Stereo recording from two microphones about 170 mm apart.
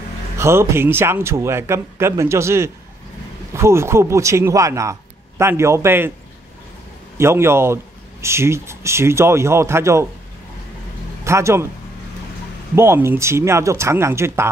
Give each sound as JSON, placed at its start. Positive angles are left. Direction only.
{"t": 0.4, "sound": "speech", "side_deg": -15}
{"t": 7.2, "sound": "speech", "side_deg": -15}
{"t": 11.2, "sound": "speech", "side_deg": -15}
{"t": 12.7, "sound": "speech", "side_deg": -15}